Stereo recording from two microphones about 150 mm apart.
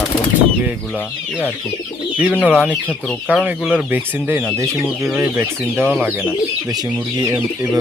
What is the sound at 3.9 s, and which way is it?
Speech, 10° right (ahead or behind).